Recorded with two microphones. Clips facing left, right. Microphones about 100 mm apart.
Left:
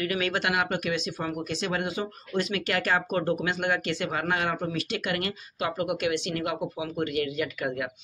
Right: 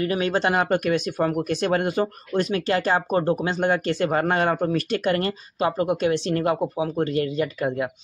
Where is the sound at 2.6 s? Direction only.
30° right (ahead or behind).